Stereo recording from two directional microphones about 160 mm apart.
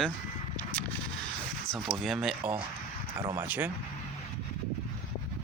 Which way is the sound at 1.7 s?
Centre (ahead or behind).